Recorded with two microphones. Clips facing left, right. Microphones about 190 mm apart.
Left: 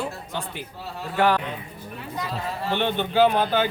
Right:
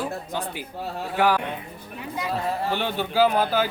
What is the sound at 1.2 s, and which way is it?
Speech, 10° right (ahead or behind).